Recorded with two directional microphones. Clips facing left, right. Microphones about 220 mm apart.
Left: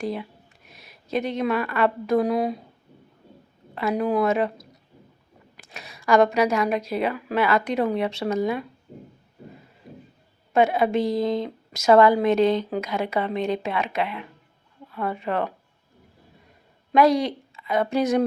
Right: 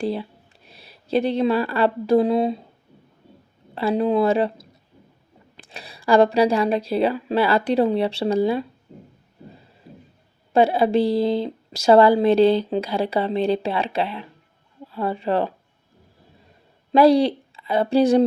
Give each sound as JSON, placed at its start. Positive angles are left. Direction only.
{"t": 0.0, "sound": "a woman's voice", "side_deg": -30}
{"t": 3.8, "sound": "a woman's voice", "side_deg": -30}
{"t": 5.6, "sound": "a woman's voice", "side_deg": -30}
{"t": 10.5, "sound": "a woman's voice", "side_deg": -30}
{"t": 16.9, "sound": "a woman's voice", "side_deg": -30}